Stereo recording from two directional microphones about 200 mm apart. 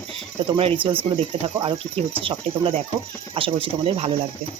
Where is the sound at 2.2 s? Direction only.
25° right (ahead or behind).